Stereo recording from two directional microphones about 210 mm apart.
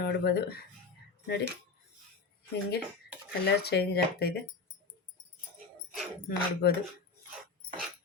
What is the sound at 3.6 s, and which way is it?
Speech, 50° left (ahead or behind).